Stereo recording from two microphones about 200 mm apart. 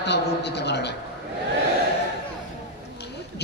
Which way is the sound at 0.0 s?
55° left (ahead or behind).